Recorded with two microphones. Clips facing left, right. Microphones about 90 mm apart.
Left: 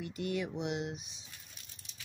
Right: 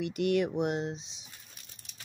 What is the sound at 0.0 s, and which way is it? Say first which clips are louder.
Speech: right 8 dB; 75° right (ahead or behind).